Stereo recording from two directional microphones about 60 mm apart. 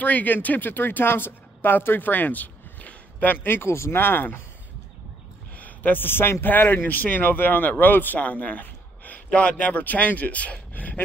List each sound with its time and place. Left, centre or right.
0.0 s speech: left
3.4 s speech: left
5.6 s speech: left